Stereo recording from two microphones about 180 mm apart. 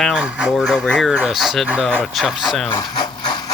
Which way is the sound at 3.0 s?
25° left (ahead or behind).